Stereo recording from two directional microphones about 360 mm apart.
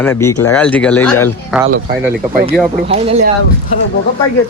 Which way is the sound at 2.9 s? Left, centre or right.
Centre.